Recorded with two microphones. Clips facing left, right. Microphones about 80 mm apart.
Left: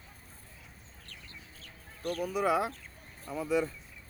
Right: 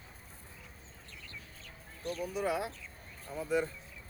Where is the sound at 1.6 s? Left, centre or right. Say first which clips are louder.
Left 2 dB; left.